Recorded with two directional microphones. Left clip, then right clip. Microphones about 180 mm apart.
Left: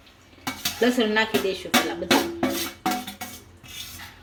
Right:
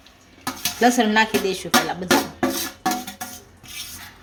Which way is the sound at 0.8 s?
55° right (ahead or behind).